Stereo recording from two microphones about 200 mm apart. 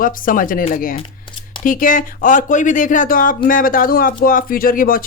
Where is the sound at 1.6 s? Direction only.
45° left (ahead or behind).